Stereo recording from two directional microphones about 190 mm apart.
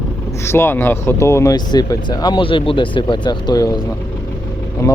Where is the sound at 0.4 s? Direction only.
15° left (ahead or behind).